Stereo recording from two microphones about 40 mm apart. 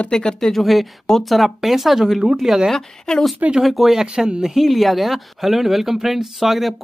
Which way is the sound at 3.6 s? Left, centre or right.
Centre.